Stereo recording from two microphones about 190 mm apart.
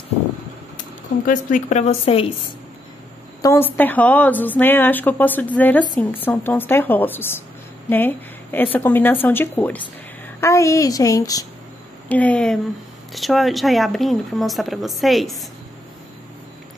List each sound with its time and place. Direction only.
1.2 s a woman's voice: 45° left (ahead or behind)
3.4 s a woman's voice: 10° left (ahead or behind)
12.1 s a woman's voice: 5° left (ahead or behind)